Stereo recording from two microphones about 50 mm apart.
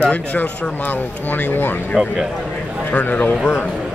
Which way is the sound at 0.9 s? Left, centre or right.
Left.